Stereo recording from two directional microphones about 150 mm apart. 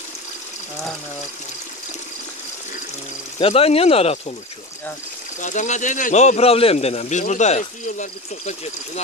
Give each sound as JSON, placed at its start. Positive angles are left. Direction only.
{"t": 3.3, "sound": "speech", "side_deg": 40}
{"t": 5.4, "sound": "speech", "side_deg": 55}